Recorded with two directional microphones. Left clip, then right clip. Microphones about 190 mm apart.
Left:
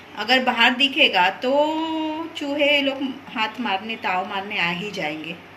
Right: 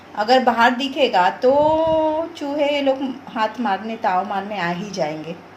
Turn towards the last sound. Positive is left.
turn(degrees=-35)  # may be behind; listen again after turning